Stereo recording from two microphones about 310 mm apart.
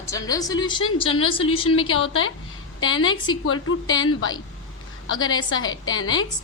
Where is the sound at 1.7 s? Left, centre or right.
Left.